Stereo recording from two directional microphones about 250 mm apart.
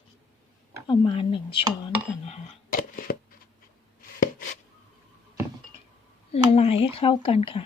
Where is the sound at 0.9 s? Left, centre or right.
Centre.